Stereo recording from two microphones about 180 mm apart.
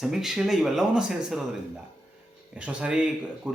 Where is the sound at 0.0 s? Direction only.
Centre (ahead or behind).